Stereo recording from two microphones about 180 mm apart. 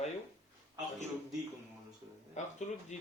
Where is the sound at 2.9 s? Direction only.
40° left (ahead or behind).